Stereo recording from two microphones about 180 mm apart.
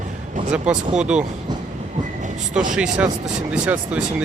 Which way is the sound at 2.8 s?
5° right (ahead or behind).